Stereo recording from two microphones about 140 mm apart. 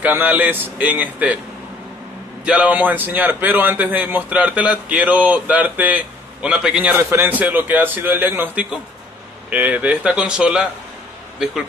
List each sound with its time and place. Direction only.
0.0 s a man's voice: 10° right (ahead or behind)
2.4 s a man's voice: 10° right (ahead or behind)